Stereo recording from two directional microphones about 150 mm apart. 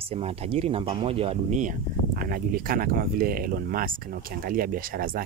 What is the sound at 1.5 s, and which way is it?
Speech, 60° right (ahead or behind).